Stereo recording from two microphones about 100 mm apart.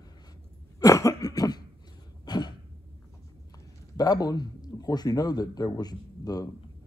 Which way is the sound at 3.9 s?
40° left (ahead or behind).